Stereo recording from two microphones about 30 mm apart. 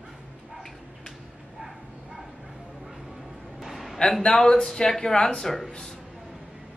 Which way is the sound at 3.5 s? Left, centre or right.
Centre.